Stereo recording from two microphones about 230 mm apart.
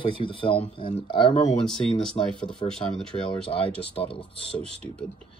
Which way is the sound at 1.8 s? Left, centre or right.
Centre.